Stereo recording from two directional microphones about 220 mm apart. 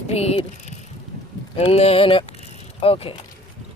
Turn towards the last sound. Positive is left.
turn(degrees=25)  # may be behind; listen again after turning